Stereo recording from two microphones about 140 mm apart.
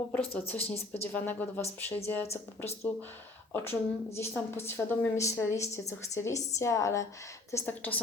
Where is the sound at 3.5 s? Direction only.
15° left (ahead or behind).